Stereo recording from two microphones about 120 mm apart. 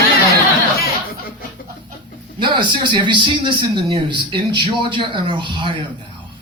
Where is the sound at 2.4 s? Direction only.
40° right (ahead or behind).